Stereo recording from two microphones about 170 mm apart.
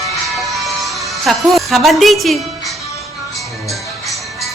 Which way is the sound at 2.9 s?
20° left (ahead or behind).